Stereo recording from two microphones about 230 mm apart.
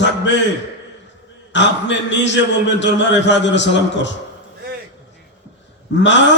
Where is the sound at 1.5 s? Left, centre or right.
Left.